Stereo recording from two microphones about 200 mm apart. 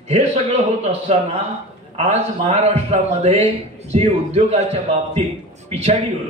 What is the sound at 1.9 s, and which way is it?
A man's voice, 35° right (ahead or behind).